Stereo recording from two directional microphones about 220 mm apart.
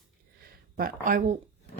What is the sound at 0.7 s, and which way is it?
Speech, 40° right (ahead or behind).